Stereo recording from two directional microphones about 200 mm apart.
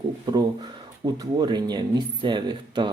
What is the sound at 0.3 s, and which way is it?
Speech, 20° right (ahead or behind).